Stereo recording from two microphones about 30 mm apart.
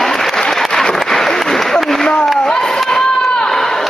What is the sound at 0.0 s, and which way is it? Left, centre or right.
Applause, centre.